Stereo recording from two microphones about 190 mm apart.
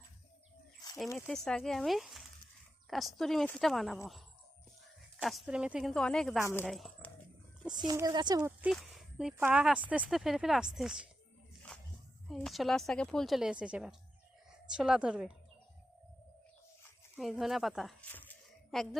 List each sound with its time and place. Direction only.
1.3 s speech: 5° left (ahead or behind)
5.2 s speech: centre (ahead or behind)
7.7 s speech: 20° right (ahead or behind)
8.6 s speech: centre (ahead or behind)
12.3 s speech: centre (ahead or behind)
17.2 s speech: centre (ahead or behind)
18.1 s zipper: 10° left (ahead or behind)